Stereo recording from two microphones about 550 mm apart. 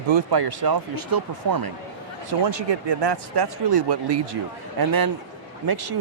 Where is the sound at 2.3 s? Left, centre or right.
Right.